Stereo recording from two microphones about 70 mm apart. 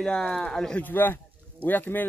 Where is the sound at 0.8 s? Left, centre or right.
Left.